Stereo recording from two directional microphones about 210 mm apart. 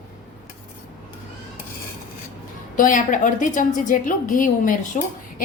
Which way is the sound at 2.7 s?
40° left (ahead or behind).